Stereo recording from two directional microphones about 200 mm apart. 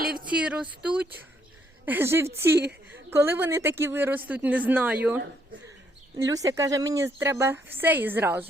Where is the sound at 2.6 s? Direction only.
55° right (ahead or behind).